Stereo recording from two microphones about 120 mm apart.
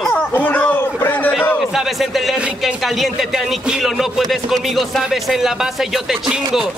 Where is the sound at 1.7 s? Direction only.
Centre (ahead or behind).